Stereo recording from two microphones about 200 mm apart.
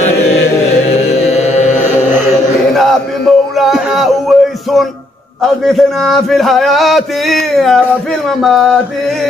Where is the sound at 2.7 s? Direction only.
Centre (ahead or behind).